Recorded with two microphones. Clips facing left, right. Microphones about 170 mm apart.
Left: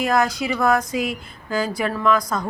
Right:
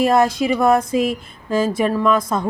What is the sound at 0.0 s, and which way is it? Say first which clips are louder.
A woman's voice: right 5 dB; 30° right (ahead or behind).